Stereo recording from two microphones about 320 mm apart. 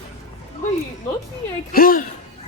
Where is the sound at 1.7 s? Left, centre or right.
Left.